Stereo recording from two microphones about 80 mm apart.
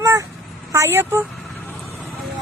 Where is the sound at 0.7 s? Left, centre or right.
Right.